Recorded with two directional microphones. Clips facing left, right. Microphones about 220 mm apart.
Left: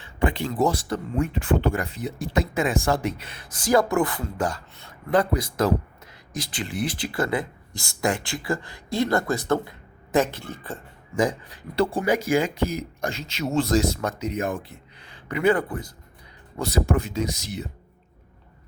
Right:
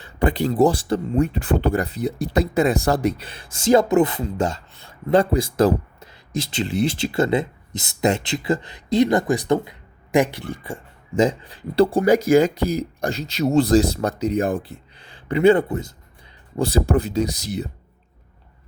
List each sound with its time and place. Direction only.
0.0 s speech: 35° right (ahead or behind); by 10.8 s 10° right (ahead or behind)
11.2 s speech: 25° right (ahead or behind)